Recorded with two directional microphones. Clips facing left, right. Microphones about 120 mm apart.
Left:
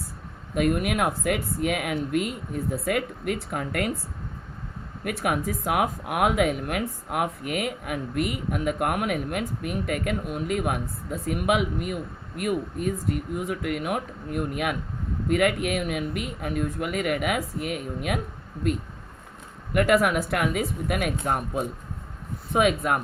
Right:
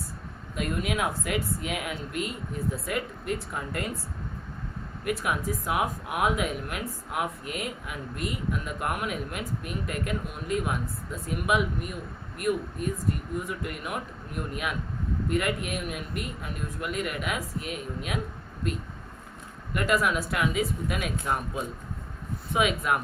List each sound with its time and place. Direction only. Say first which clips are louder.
0.5 s speech: left 6 dB; 60° left (ahead or behind)
5.0 s speech: left 2 dB; 55° left (ahead or behind)
19.7 s speech: left 5 dB; 60° left (ahead or behind)